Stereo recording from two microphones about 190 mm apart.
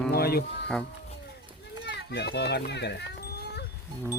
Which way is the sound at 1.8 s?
65° left (ahead or behind).